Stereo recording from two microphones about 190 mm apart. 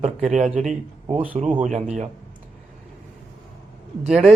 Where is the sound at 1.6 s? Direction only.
40° right (ahead or behind).